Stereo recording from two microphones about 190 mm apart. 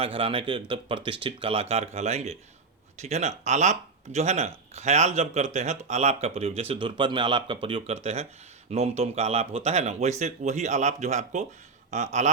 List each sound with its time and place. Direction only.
0.0 s speech: 30° right (ahead or behind)